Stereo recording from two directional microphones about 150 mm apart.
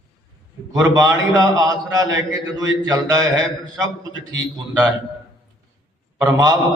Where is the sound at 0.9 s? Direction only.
25° right (ahead or behind).